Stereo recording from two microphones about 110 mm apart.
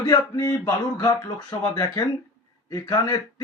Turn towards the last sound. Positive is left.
turn(degrees=35)  # may be behind; listen again after turning